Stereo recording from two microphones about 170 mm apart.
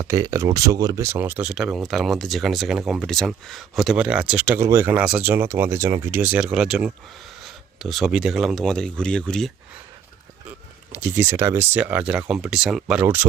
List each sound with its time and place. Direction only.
0.0 s speech: 15° right (ahead or behind); by 9.5 s 5° left (ahead or behind)
10.9 s speech: 15° right (ahead or behind)